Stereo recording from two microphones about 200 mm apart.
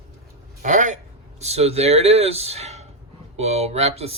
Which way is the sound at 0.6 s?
40° right (ahead or behind).